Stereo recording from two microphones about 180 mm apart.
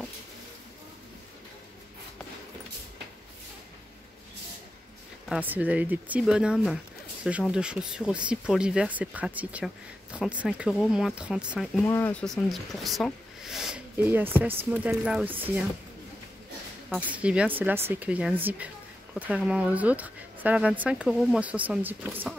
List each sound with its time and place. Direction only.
5.3 s speech: 10° right (ahead or behind)
11.8 s speech: 15° left (ahead or behind); by 15.6 s 10° right (ahead or behind)
17.1 s speech: 5° right (ahead or behind)